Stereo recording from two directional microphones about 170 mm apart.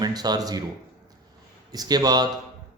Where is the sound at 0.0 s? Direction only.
25° right (ahead or behind).